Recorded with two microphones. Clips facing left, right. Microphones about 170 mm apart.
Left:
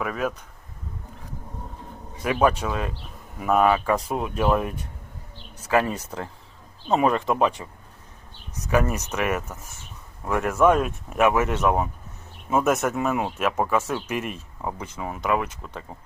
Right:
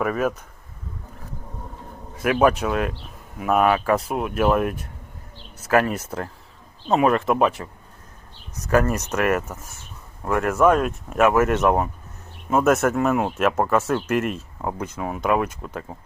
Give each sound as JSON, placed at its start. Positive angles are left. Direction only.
{"t": 0.0, "sound": "speech", "side_deg": -5}
{"t": 2.2, "sound": "speech", "side_deg": -10}
{"t": 6.1, "sound": "speech", "side_deg": -5}
{"t": 8.6, "sound": "speech", "side_deg": 10}
{"t": 14.6, "sound": "speech", "side_deg": -10}